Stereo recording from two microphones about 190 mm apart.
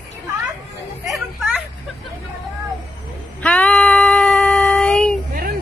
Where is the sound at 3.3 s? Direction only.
5° left (ahead or behind).